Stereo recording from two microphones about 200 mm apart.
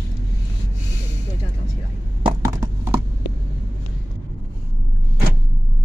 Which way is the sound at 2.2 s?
15° right (ahead or behind).